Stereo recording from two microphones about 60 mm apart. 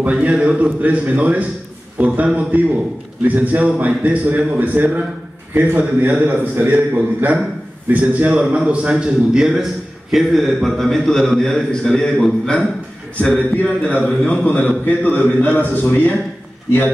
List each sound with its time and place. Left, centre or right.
0.0 s a man's voice: right
10.1 s a man's voice: centre
13.6 s a man's voice: centre